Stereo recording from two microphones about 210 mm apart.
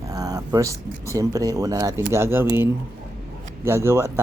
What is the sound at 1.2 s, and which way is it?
Speech, 15° right (ahead or behind).